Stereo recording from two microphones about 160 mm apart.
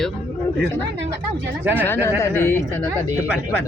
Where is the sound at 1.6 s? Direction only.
10° right (ahead or behind).